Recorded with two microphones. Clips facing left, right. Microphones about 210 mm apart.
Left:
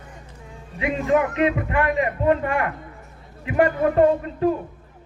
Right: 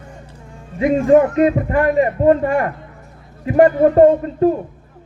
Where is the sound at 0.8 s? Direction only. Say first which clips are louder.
Right 8 dB; 40° right (ahead or behind).